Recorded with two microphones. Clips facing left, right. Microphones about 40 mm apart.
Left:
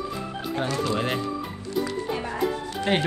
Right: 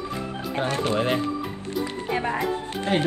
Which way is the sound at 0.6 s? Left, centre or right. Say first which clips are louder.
Right 2 dB; right.